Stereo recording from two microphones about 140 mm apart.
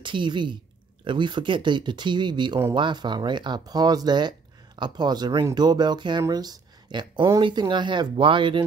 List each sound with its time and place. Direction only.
0.0 s a woman's voice: 35° right (ahead or behind)